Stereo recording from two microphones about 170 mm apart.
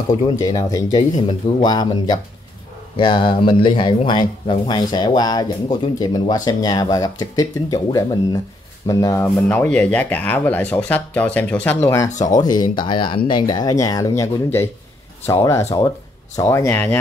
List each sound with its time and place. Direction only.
0.4 s speech: 25° left (ahead or behind)
12.1 s speech: 45° left (ahead or behind)
12.4 s speech: 25° left (ahead or behind)